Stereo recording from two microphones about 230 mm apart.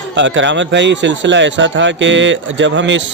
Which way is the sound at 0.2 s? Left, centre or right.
Right.